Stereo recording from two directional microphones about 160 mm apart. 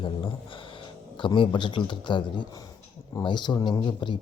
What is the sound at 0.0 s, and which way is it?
Speech, 35° left (ahead or behind).